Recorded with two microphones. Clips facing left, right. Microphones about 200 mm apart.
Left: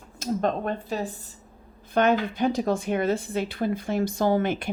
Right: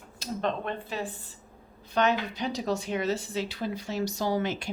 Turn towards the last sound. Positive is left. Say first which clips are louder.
# left 5 dB
turn(degrees=55)  # may be behind; listen again after turning